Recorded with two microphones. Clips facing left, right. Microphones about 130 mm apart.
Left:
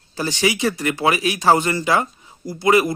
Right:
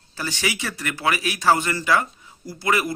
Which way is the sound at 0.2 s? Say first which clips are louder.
Left 7 dB; 20° left (ahead or behind).